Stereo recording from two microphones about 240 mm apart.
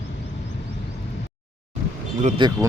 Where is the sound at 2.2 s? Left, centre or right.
Right.